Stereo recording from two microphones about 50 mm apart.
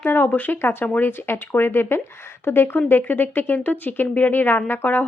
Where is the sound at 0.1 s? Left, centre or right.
Left.